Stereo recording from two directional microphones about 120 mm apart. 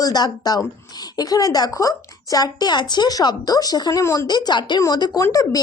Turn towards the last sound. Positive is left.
turn(degrees=30)  # may be behind; listen again after turning